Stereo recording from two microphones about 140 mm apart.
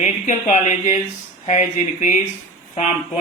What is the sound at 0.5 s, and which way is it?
Speech, 60° left (ahead or behind).